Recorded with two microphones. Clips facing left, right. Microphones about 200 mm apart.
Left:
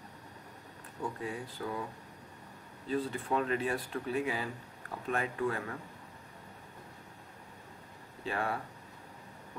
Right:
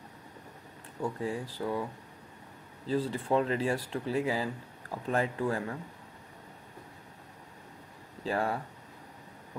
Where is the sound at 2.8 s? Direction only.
30° right (ahead or behind).